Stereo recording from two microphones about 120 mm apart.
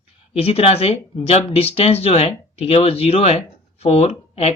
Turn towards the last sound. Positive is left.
turn(degrees=60)  # may be behind; listen again after turning